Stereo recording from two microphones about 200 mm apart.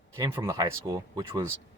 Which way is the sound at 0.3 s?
15° right (ahead or behind).